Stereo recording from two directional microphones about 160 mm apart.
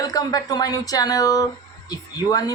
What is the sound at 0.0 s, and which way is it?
Speech, 25° left (ahead or behind).